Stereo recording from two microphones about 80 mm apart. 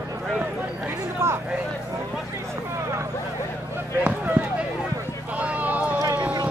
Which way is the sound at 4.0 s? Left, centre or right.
Centre.